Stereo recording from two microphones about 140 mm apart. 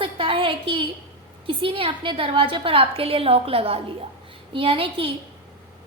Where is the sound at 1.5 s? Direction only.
40° right (ahead or behind).